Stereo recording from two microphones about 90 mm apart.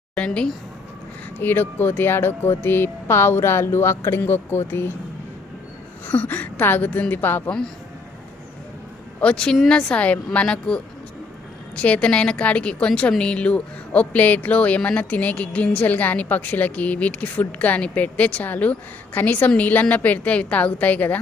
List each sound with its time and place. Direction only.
0.2 s a woman's voice: 10° left (ahead or behind)
1.4 s speech: 20° left (ahead or behind)
6.1 s speech: 20° left (ahead or behind)
9.2 s a woman's voice: 10° left (ahead or behind)